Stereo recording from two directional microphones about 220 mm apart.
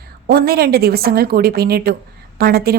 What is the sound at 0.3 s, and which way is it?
A woman's voice, 45° right (ahead or behind).